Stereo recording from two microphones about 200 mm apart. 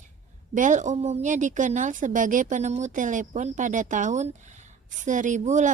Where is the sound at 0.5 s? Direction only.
40° right (ahead or behind).